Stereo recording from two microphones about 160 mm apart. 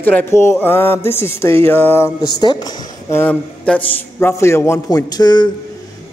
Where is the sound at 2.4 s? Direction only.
25° left (ahead or behind).